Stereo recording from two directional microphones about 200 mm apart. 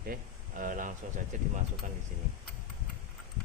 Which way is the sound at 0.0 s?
45° right (ahead or behind).